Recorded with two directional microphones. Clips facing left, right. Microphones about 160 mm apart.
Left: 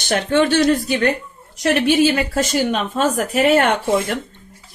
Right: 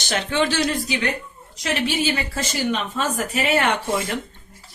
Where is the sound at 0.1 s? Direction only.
50° left (ahead or behind).